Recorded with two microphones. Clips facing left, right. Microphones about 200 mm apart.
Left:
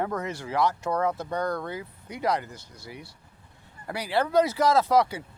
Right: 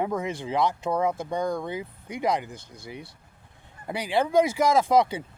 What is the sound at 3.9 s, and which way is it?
Speech, 15° right (ahead or behind).